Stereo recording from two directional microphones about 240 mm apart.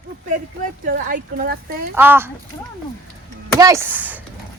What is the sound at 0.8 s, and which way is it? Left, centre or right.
Speech, right.